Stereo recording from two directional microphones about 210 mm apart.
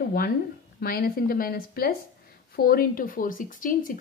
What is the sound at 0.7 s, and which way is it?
A woman's voice, 45° left (ahead or behind).